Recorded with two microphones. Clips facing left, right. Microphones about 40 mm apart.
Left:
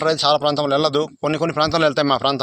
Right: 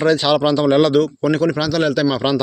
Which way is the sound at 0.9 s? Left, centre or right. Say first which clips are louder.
Right 4 dB; centre.